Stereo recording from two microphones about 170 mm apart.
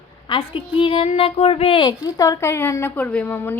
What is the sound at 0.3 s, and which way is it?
A woman's voice, 30° left (ahead or behind).